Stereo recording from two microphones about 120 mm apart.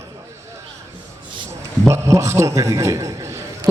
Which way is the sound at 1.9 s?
25° right (ahead or behind).